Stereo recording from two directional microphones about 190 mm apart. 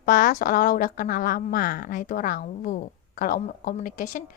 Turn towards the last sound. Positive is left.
turn(degrees=45)  # may be behind; listen again after turning